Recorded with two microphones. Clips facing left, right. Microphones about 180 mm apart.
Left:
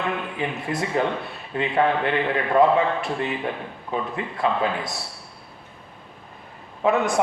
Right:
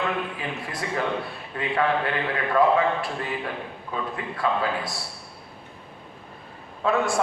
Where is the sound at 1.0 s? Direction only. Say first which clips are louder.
Even; 25° left (ahead or behind).